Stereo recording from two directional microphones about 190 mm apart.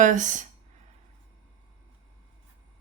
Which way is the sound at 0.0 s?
40° right (ahead or behind).